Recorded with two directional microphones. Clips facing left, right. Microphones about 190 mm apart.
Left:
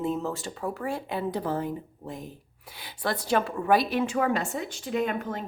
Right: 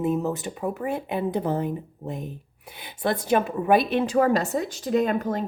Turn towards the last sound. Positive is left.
turn(degrees=-40)  # may be behind; listen again after turning